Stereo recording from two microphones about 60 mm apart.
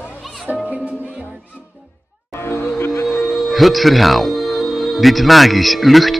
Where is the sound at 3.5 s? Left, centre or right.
Centre.